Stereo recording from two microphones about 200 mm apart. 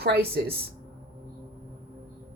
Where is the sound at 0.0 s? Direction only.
55° right (ahead or behind).